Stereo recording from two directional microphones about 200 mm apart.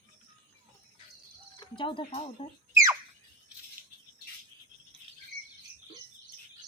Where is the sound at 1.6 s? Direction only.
25° left (ahead or behind).